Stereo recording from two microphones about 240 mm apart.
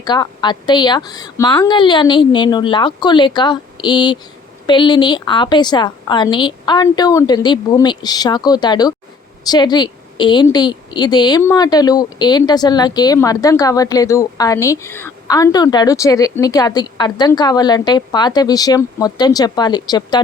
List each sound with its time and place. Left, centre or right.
0.0 s a woman's voice: centre